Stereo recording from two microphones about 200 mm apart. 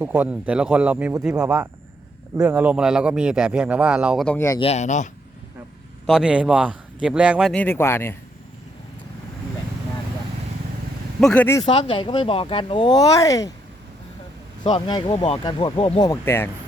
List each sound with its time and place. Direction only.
0.0 s a man's voice: 5° right (ahead or behind)
4.4 s speech: 15° left (ahead or behind)
4.6 s speech: 35° left (ahead or behind)
6.1 s a man's voice: 5° right (ahead or behind)
7.5 s speech: 10° left (ahead or behind)
11.2 s speech: 5° left (ahead or behind)
11.6 s speech: 25° left (ahead or behind)
14.6 s speech: 25° left (ahead or behind)